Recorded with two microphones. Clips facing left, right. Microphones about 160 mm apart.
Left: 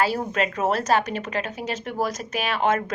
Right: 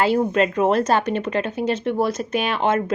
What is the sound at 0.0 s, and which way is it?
Speech, 30° right (ahead or behind).